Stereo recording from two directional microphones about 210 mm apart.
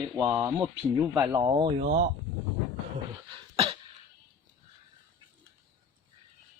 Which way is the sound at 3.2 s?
25° right (ahead or behind).